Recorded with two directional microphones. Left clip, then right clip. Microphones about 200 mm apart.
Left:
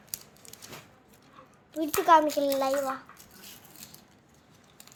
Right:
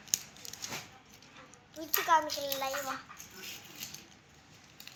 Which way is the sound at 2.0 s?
50° left (ahead or behind).